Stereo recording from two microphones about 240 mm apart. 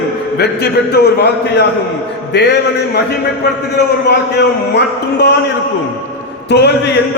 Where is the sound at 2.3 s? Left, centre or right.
Left.